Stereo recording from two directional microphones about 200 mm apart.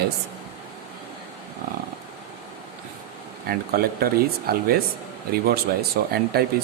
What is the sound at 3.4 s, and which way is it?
Speech, 50° right (ahead or behind).